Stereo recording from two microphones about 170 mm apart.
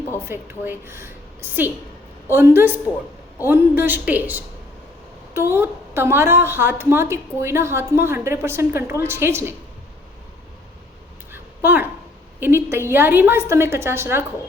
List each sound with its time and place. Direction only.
0.3 s a woman's voice: 15° right (ahead or behind)
11.3 s a sound: 10° right (ahead or behind)
12.4 s a woman's voice: 15° right (ahead or behind)